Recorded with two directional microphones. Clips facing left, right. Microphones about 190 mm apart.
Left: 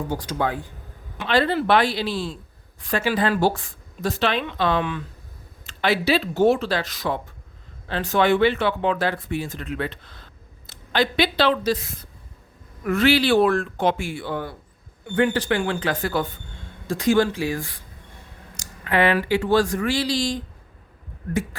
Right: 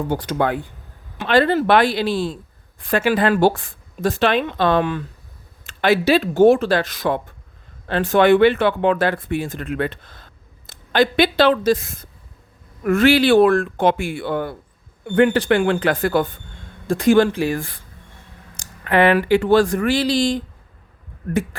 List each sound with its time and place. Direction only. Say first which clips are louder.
0.1 s speech: right 5 dB; 60° right (ahead or behind)
1.3 s speech: right 4 dB; 50° right (ahead or behind)